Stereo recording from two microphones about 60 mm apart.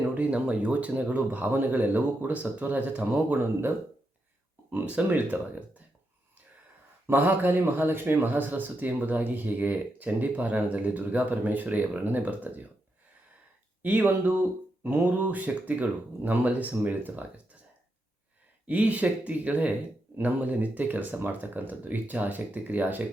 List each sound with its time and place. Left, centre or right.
0.1 s speech: right
4.7 s speech: right
7.1 s speech: right
13.8 s speech: right
18.6 s speech: right